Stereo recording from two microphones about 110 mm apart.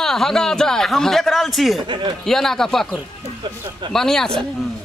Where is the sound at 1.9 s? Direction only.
45° right (ahead or behind).